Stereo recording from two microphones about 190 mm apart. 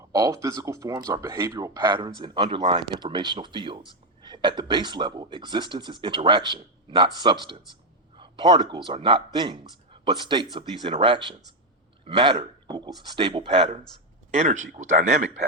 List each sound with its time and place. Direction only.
0.1 s speech: 15° right (ahead or behind); by 15.4 s 40° right (ahead or behind)